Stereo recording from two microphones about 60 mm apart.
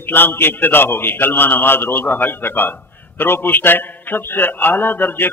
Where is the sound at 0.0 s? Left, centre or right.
Left.